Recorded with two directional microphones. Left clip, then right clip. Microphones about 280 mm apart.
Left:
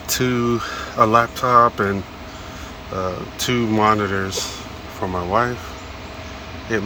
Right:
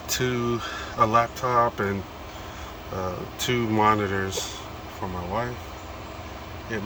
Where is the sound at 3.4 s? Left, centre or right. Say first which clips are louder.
Left 4 dB; centre.